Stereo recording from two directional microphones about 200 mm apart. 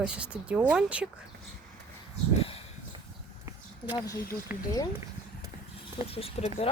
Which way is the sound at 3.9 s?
20° left (ahead or behind).